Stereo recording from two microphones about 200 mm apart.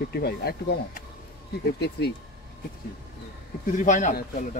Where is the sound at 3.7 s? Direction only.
40° left (ahead or behind).